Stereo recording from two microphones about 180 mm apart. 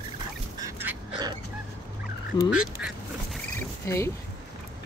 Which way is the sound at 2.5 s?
5° right (ahead or behind).